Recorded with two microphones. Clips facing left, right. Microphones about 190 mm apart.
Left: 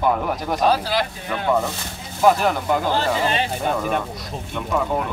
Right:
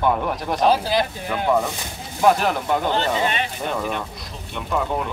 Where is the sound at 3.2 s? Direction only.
35° left (ahead or behind).